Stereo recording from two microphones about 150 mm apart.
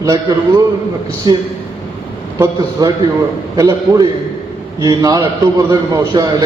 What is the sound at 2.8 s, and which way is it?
A man's voice, 25° right (ahead or behind).